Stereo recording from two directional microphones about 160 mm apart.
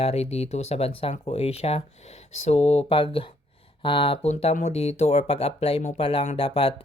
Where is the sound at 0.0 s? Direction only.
40° left (ahead or behind).